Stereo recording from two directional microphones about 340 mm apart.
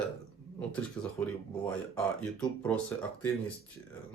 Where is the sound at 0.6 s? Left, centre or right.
Centre.